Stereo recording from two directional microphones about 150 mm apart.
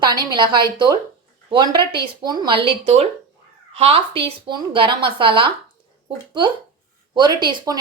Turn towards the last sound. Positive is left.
turn(degrees=-30)  # may be behind; listen again after turning